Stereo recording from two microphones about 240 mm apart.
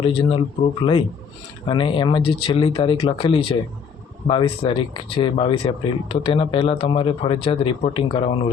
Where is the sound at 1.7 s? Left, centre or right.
Left.